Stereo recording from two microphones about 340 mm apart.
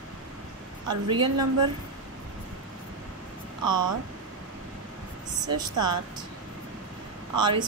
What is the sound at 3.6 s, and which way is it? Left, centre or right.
Speech, right.